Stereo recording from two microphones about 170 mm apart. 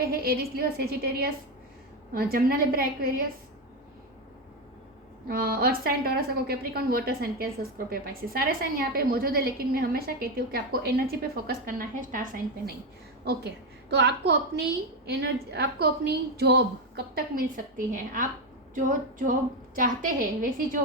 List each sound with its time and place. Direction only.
0.0 s a woman's voice: 60° right (ahead or behind)
5.3 s a woman's voice: 60° right (ahead or behind)
13.9 s a woman's voice: 80° right; by 20.5 s 55° right (ahead or behind)